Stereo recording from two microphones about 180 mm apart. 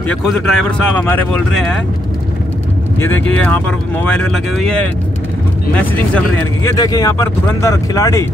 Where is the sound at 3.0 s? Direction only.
10° left (ahead or behind).